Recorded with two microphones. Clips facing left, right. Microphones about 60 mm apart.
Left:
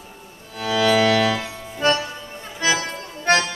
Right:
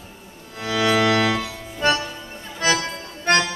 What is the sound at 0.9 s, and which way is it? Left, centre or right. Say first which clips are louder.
Music: left 1 dB; centre.